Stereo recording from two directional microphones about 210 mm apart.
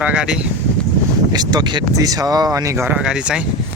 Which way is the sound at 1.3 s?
20° right (ahead or behind).